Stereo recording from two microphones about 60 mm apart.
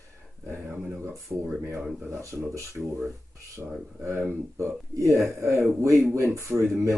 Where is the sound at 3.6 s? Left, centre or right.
Centre.